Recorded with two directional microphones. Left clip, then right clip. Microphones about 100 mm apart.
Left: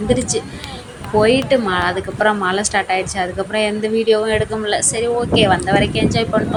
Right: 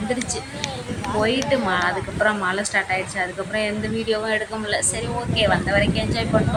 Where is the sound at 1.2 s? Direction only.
35° left (ahead or behind).